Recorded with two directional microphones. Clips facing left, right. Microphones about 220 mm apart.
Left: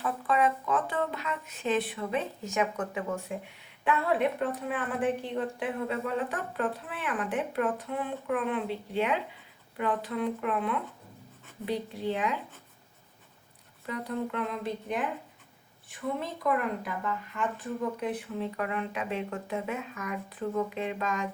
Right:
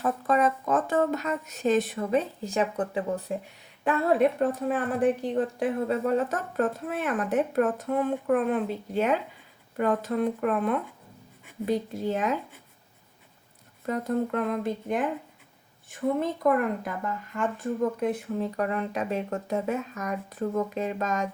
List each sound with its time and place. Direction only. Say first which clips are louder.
0.0 s speech: right 3 dB; 40° right (ahead or behind)
13.8 s speech: right 6 dB; 45° right (ahead or behind)